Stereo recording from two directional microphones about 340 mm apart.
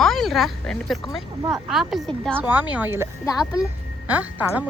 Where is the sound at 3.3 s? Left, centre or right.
Centre.